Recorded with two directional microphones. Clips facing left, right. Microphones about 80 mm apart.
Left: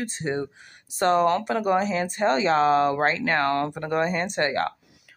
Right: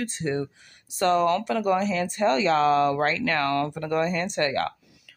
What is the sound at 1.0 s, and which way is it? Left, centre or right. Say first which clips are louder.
Speech: left 1 dB; left.